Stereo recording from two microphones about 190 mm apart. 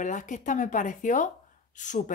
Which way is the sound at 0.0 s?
40° left (ahead or behind).